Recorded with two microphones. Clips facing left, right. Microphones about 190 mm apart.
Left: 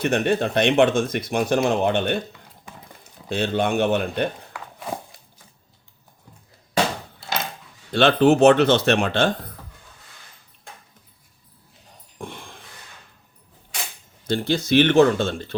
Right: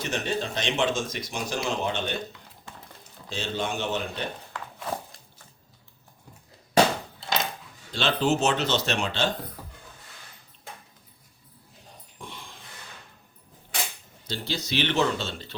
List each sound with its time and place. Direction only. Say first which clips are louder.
0.0 s speech: left 9 dB; 60° left (ahead or behind)
3.2 s speech: left 8 dB; 60° left (ahead or behind)
7.9 s speech: left 9 dB; 60° left (ahead or behind)
12.2 s a sound: left 7 dB; 55° left (ahead or behind)
14.3 s speech: left 11 dB; 55° left (ahead or behind)